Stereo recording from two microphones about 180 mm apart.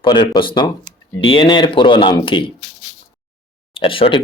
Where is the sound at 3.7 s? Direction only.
30° left (ahead or behind).